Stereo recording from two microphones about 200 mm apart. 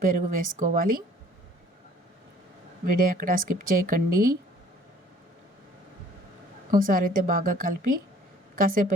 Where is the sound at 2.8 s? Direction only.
45° right (ahead or behind).